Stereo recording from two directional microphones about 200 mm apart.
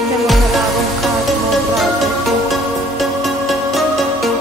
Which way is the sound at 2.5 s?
Centre (ahead or behind).